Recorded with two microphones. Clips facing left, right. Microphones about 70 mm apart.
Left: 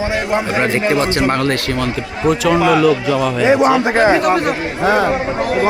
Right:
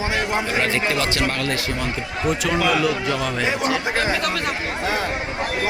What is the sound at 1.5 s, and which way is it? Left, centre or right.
Speech, left.